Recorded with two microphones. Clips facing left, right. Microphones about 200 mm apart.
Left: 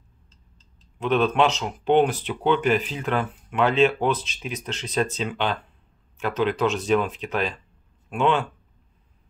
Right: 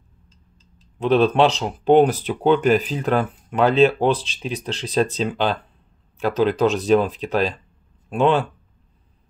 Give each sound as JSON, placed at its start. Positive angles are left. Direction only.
{"t": 0.9, "sound": "speech", "side_deg": -35}